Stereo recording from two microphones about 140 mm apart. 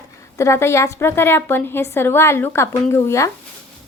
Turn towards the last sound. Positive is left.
turn(degrees=20)  # may be behind; listen again after turning